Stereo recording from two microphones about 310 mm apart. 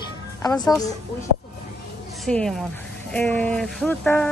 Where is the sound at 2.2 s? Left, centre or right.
Centre.